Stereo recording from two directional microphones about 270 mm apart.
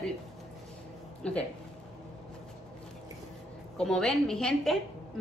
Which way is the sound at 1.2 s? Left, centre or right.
Centre.